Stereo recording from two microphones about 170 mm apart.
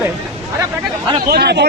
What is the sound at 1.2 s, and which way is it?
Speech, 70° right (ahead or behind).